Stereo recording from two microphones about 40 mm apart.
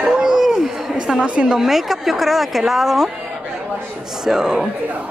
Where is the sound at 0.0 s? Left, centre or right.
Centre.